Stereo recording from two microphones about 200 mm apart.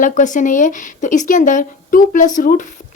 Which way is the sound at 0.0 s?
40° left (ahead or behind).